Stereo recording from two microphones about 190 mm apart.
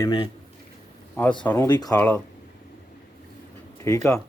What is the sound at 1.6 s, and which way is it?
Speech, 20° left (ahead or behind).